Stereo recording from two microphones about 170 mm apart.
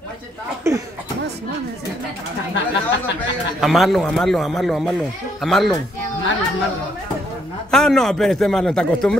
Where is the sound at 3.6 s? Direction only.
Centre (ahead or behind).